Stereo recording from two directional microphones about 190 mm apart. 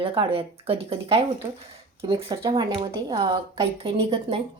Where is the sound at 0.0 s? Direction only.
25° right (ahead or behind).